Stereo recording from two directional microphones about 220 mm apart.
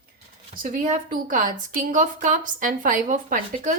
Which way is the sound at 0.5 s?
40° right (ahead or behind).